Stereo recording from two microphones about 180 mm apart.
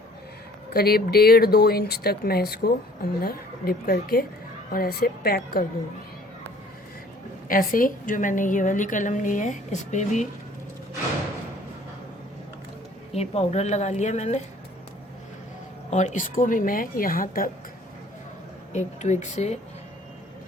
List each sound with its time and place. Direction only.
0.7 s speech: 60° left (ahead or behind)
7.4 s a woman's voice: 50° left (ahead or behind)
13.1 s a woman's voice: 35° left (ahead or behind)
15.9 s a woman's voice: 40° left (ahead or behind)
18.7 s a woman's voice: 40° left (ahead or behind)